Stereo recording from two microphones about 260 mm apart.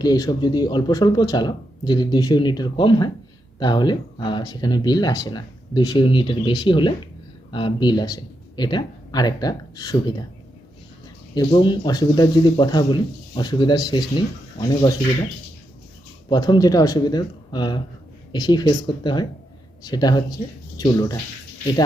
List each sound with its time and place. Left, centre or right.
0.0 s speech: centre
11.3 s speech: centre
16.3 s speech: centre